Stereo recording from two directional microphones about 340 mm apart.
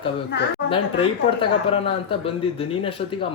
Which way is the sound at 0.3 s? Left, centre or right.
Left.